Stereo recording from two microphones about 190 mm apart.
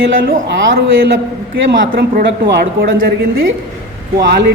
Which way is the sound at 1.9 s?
45° right (ahead or behind).